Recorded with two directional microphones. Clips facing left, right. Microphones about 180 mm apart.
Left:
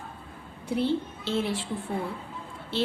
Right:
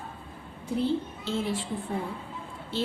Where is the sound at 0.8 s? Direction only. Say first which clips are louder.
Left 1 dB; 75° left (ahead or behind).